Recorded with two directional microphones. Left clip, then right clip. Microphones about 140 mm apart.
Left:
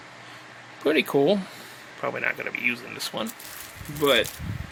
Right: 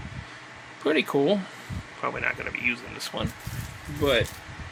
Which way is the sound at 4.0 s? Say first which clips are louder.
Left 2 dB; 50° left (ahead or behind).